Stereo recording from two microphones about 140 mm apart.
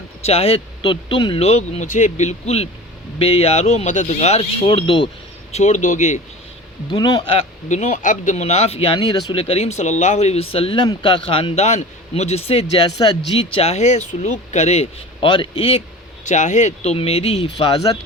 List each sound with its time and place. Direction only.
0.3 s speech: 45° left (ahead or behind)
5.5 s speech: 55° left (ahead or behind)
6.9 s speech: 35° left (ahead or behind)
7.7 s speech: 60° left (ahead or behind)
9.0 s speech: 30° left (ahead or behind)
9.4 s speech: 45° left (ahead or behind)
12.8 s speech: 35° left (ahead or behind)
16.2 s speech: 60° left (ahead or behind); by 17.8 s 45° left (ahead or behind)